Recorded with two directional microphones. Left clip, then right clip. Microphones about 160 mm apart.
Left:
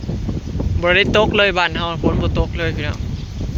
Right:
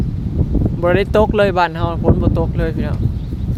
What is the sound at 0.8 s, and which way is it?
Speech, 35° right (ahead or behind).